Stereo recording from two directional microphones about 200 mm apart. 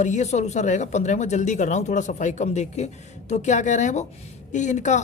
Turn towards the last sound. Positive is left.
turn(degrees=35)  # may be behind; listen again after turning